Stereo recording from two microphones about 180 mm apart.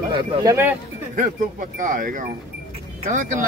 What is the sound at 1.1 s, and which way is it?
Speech, 45° right (ahead or behind).